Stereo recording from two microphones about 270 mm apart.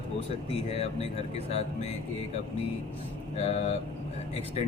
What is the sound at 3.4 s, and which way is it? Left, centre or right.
Speech, left.